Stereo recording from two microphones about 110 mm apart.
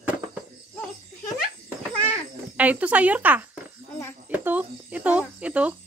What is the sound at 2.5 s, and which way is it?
Speech, 15° right (ahead or behind).